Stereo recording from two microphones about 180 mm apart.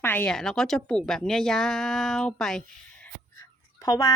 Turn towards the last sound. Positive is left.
turn(degrees=20)  # may be behind; listen again after turning